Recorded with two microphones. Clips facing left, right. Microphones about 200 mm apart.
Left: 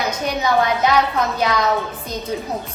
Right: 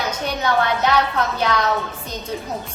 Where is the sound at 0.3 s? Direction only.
10° left (ahead or behind).